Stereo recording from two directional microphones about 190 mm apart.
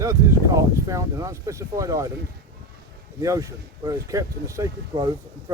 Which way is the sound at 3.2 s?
15° right (ahead or behind).